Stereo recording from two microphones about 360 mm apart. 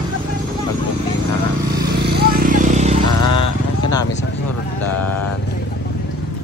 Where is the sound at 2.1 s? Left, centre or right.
Right.